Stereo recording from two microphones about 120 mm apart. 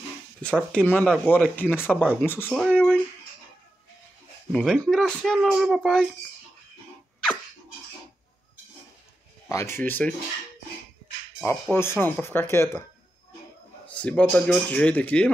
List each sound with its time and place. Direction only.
0.4 s a man's voice: 10° left (ahead or behind)
4.5 s speech: 5° left (ahead or behind)
9.5 s speech: 25° left (ahead or behind)
11.7 s speech: 20° left (ahead or behind)
13.8 s a man's voice: 10° left (ahead or behind)